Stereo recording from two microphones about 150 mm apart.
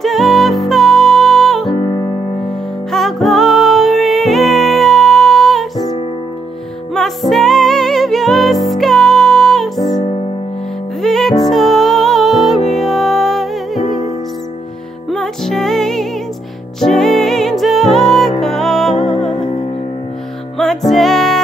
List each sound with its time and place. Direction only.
0.0 s music: centre (ahead or behind)
1.7 s music: 30° left (ahead or behind)
2.4 s music: centre (ahead or behind)
6.9 s music: centre (ahead or behind)
11.0 s music: centre (ahead or behind)
20.5 s music: centre (ahead or behind)